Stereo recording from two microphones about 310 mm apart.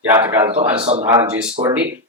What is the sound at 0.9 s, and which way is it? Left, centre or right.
Speech, right.